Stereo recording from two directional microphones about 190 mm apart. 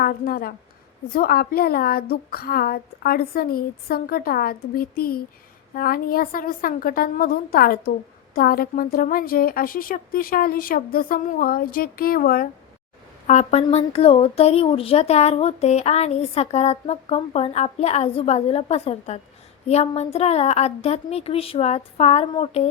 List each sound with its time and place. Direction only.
0.0 s a woman's voice: 50° left (ahead or behind)
13.2 s a woman's voice: 35° left (ahead or behind)